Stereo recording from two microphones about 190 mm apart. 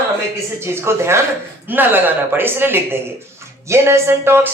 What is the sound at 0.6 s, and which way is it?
A woman's voice, 15° right (ahead or behind).